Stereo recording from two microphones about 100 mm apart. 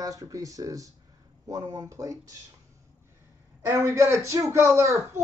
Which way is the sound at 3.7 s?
30° right (ahead or behind).